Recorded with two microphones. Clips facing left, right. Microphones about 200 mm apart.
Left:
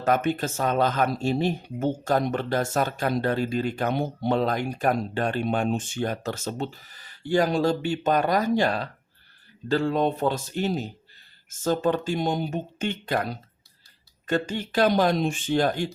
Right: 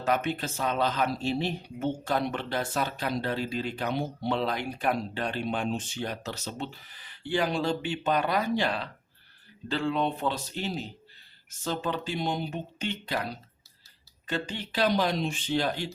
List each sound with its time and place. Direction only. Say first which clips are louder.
0.0 s speech: left 5 dB; 50° left (ahead or behind)